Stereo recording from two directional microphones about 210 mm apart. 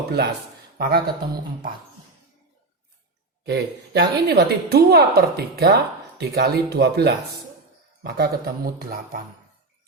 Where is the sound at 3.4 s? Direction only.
50° right (ahead or behind).